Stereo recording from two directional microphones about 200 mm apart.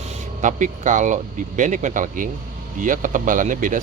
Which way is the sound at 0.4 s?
40° right (ahead or behind).